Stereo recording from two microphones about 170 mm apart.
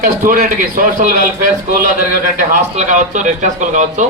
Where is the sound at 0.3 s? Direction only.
55° right (ahead or behind).